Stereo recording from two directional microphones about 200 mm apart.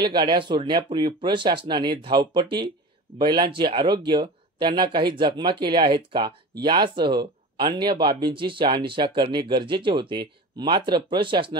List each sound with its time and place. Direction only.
0.0 s speech: 20° right (ahead or behind)